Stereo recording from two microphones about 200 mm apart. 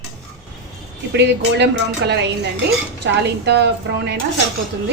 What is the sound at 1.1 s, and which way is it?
A woman's voice, 60° right (ahead or behind).